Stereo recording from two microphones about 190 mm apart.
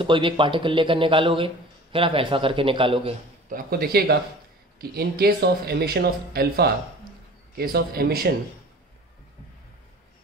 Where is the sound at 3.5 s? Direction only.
55° right (ahead or behind).